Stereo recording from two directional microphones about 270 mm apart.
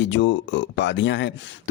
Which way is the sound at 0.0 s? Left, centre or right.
Left.